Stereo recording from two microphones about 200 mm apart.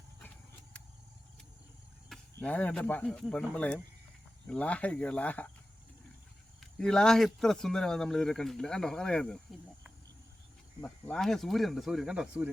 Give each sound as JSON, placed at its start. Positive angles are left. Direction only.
{"t": 2.4, "sound": "speech", "side_deg": 5}
{"t": 6.6, "sound": "speech", "side_deg": 5}